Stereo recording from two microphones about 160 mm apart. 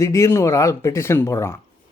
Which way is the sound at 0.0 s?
20° left (ahead or behind).